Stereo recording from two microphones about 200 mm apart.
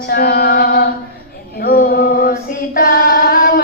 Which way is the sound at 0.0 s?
50° left (ahead or behind).